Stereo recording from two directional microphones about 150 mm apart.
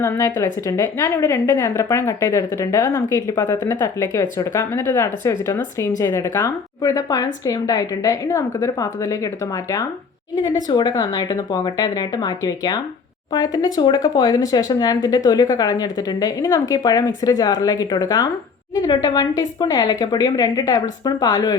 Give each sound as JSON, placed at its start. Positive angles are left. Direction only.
{"t": 0.0, "sound": "speech", "side_deg": 20}